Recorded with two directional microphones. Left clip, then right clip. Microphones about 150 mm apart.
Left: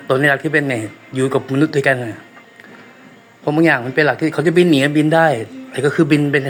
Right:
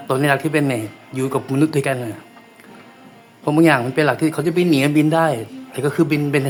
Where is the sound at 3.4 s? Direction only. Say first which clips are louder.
Even; 15° right (ahead or behind).